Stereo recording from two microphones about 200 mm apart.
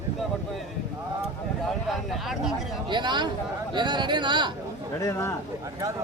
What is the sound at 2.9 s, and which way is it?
Speech, 20° right (ahead or behind).